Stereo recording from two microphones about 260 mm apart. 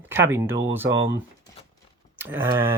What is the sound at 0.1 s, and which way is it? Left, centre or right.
Speech, centre.